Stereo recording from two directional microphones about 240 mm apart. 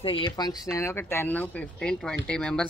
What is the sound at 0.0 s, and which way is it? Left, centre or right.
Speech, left.